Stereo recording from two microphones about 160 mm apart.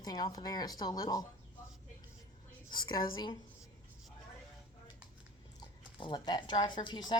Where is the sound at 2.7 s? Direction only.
30° left (ahead or behind).